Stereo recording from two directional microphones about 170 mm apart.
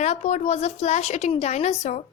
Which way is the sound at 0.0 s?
40° left (ahead or behind).